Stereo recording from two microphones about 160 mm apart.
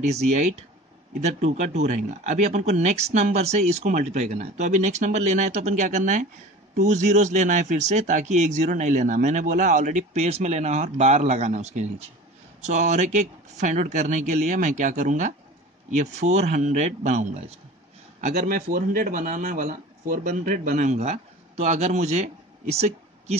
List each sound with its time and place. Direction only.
0.1 s speech: 45° right (ahead or behind)